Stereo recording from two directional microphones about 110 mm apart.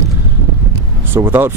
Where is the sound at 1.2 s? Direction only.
20° right (ahead or behind).